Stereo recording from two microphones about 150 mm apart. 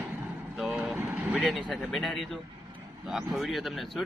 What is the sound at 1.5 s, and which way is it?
Speech, 5° left (ahead or behind).